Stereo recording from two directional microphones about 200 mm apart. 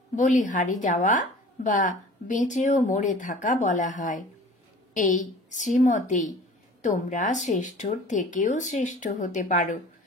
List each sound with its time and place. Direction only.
0.1 s a woman's voice: 40° left (ahead or behind)